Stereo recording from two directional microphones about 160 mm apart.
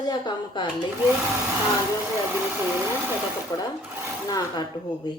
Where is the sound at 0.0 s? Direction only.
25° left (ahead or behind).